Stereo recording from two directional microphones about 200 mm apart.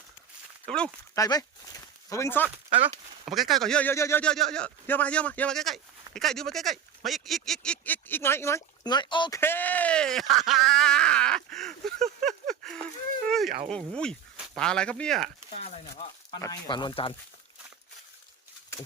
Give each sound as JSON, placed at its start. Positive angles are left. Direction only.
{"t": 1.1, "sound": "speech", "side_deg": 15}
{"t": 2.8, "sound": "speech", "side_deg": 0}
{"t": 9.4, "sound": "speech", "side_deg": 10}
{"t": 12.2, "sound": "a sound", "side_deg": 0}
{"t": 13.7, "sound": "speech", "side_deg": 5}
{"t": 15.5, "sound": "speech", "side_deg": 35}
{"t": 16.3, "sound": "speech", "side_deg": 20}